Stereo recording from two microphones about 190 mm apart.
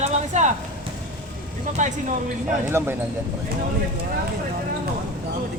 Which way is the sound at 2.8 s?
15° right (ahead or behind).